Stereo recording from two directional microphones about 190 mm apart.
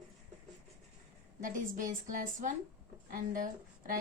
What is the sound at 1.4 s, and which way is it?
A woman's voice, 45° right (ahead or behind).